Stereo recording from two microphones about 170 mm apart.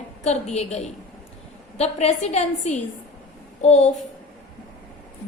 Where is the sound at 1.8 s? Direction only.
40° left (ahead or behind).